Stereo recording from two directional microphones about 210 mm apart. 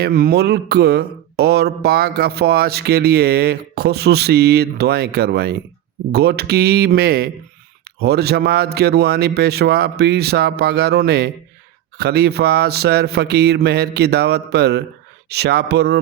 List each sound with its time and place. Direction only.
0.0 s mantra: 45° right (ahead or behind)